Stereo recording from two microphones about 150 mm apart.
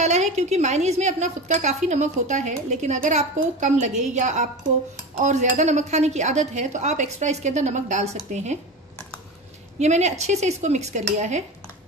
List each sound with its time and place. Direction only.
0.0 s a woman's voice: 50° right (ahead or behind)
9.8 s a woman's voice: 50° right (ahead or behind)